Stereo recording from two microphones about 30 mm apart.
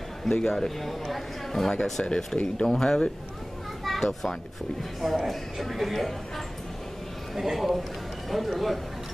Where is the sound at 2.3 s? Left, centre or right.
Left.